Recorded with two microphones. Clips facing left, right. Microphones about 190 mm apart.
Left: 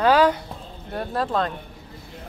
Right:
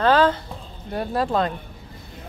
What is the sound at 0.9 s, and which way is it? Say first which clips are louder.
Speech: right 2 dB; 5° right (ahead or behind).